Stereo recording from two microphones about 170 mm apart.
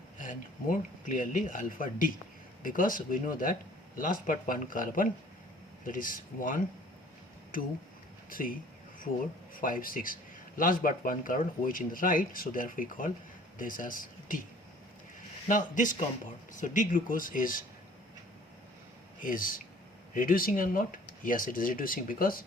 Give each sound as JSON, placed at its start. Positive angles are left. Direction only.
{"t": 0.2, "sound": "speech", "side_deg": 50}
{"t": 9.6, "sound": "speech", "side_deg": 55}
{"t": 15.4, "sound": "speech", "side_deg": 50}
{"t": 19.2, "sound": "speech", "side_deg": 55}